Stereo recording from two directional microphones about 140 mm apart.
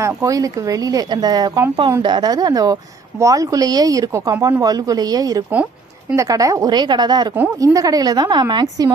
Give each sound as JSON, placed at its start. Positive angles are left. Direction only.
{"t": 0.0, "sound": "a woman's voice", "side_deg": -25}
{"t": 5.5, "sound": "a sound", "side_deg": -10}
{"t": 6.1, "sound": "a woman's voice", "side_deg": -25}